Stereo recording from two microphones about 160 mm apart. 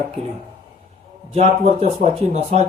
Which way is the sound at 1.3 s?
40° right (ahead or behind).